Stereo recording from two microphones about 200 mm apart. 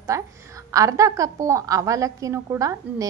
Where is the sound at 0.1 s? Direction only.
15° right (ahead or behind).